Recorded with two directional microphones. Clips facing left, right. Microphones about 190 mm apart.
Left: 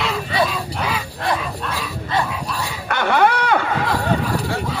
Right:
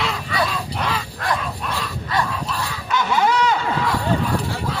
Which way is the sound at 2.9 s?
60° left (ahead or behind).